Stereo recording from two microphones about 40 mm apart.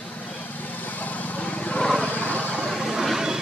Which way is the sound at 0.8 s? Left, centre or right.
Left.